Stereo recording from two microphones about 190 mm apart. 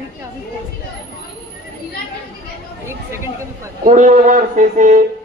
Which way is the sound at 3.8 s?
40° right (ahead or behind).